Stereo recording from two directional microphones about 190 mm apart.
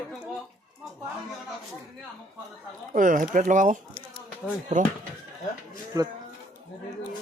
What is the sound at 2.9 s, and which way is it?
Speech, 45° right (ahead or behind).